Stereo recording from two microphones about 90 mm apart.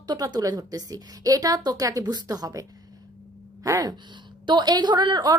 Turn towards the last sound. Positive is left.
turn(degrees=-55)  # may be behind; listen again after turning